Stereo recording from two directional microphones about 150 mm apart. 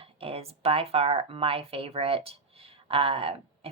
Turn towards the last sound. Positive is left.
turn(degrees=-40)  # may be behind; listen again after turning